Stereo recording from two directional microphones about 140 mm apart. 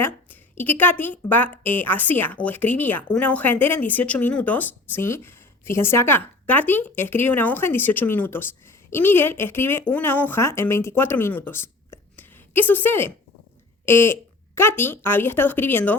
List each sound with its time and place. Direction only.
0.0 s a woman's voice: 15° left (ahead or behind)